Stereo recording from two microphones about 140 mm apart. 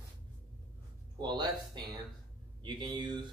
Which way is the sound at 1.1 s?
30° right (ahead or behind).